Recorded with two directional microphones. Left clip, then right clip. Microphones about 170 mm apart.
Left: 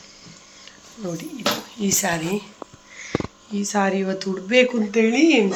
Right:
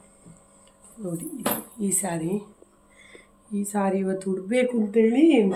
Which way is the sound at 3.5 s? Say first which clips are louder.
Left 4 dB; centre (ahead or behind).